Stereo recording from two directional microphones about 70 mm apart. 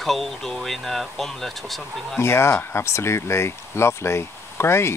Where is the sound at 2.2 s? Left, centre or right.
Left.